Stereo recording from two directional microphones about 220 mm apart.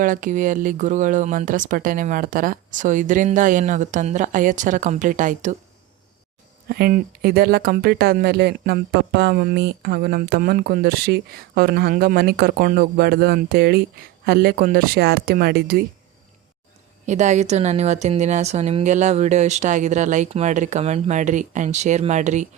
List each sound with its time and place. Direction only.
0.0 s speech: 35° right (ahead or behind)
6.7 s speech: 45° right (ahead or behind)
17.1 s speech: 30° right (ahead or behind)